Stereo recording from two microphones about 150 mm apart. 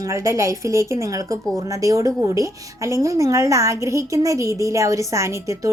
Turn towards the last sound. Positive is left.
turn(degrees=-20)  # may be behind; listen again after turning